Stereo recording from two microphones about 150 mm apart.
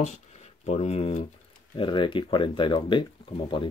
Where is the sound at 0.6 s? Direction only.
45° left (ahead or behind).